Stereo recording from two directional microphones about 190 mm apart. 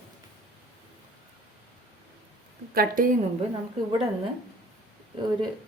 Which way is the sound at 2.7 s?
45° right (ahead or behind).